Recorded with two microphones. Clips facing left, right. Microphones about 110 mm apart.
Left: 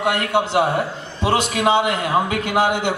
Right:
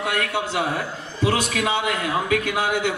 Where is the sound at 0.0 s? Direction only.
25° left (ahead or behind).